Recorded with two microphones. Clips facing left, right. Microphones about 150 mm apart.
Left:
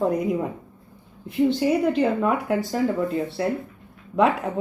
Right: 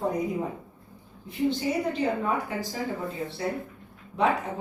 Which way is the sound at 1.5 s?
70° left (ahead or behind).